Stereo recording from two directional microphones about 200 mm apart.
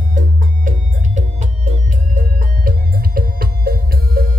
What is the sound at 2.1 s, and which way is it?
Music, 45° right (ahead or behind).